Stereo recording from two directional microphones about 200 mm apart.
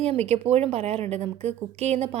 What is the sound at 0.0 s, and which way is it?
A woman's voice, 30° right (ahead or behind).